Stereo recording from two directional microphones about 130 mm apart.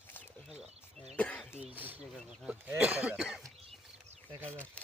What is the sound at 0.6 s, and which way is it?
Speech, 55° right (ahead or behind).